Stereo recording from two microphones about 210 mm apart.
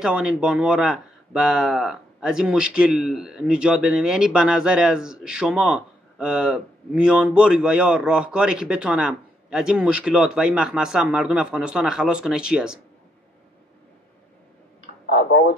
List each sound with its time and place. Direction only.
0.0 s speech: 5° right (ahead or behind)
15.0 s speech: 50° left (ahead or behind)